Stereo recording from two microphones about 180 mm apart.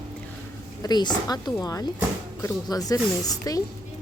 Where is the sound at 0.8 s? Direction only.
25° left (ahead or behind).